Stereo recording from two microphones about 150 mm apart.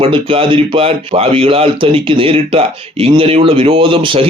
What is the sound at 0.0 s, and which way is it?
Speech, 35° right (ahead or behind).